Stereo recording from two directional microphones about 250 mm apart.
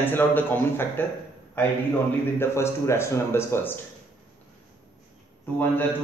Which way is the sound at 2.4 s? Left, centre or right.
Centre.